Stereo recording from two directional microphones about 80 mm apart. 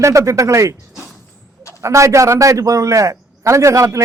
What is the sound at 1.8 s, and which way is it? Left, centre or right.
A man's voice, right.